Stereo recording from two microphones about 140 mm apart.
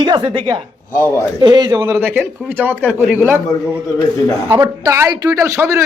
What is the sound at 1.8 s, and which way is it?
Speech, 15° right (ahead or behind).